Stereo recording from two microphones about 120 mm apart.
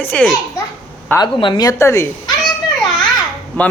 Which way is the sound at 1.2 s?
40° left (ahead or behind).